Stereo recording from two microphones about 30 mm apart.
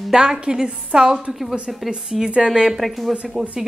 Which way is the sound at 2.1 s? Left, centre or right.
Centre.